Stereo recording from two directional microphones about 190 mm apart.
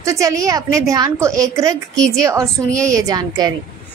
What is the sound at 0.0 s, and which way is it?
A woman's voice, 15° right (ahead or behind).